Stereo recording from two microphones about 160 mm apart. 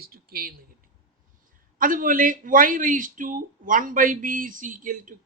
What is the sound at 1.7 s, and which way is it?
A man's voice, 60° right (ahead or behind).